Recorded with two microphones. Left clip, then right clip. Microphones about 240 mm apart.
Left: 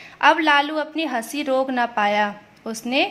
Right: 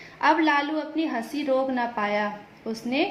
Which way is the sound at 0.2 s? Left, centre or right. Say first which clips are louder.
Left 5 dB; left.